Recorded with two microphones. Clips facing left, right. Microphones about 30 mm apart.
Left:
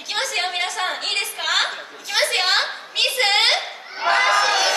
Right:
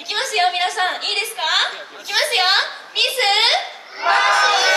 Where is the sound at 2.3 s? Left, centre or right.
Right.